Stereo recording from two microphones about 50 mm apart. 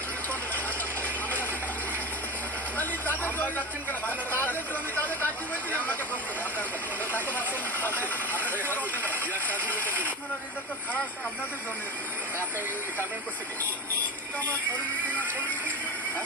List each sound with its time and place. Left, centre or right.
1.0 s vehicle: left
2.7 s vehicle: left
4.0 s speech: left
7.1 s speech: left